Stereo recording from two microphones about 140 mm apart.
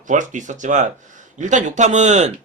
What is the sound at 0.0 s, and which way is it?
A man's voice, 65° right (ahead or behind).